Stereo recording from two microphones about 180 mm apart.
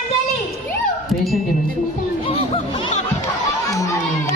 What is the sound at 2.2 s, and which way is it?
Music, 35° left (ahead or behind).